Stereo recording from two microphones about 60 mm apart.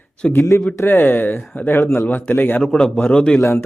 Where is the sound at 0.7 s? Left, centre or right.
Left.